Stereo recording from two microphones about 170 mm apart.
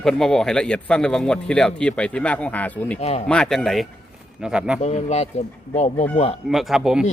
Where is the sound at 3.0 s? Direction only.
40° left (ahead or behind).